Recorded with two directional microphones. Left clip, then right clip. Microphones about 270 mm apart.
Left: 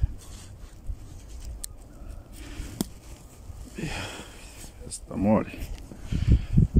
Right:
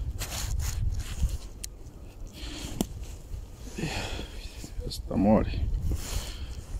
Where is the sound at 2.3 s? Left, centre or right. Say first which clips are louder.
Right 1 dB; centre.